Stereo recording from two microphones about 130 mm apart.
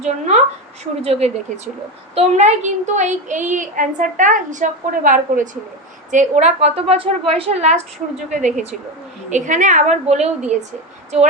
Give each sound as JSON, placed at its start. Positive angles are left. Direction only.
{"t": 0.0, "sound": "a woman's voice", "side_deg": -60}
{"t": 2.1, "sound": "a woman's voice", "side_deg": -65}
{"t": 6.1, "sound": "a woman's voice", "side_deg": -70}